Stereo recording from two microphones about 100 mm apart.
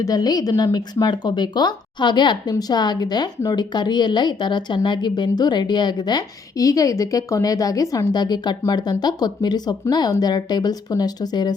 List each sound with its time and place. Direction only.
0.0 s a woman's voice: 40° left (ahead or behind)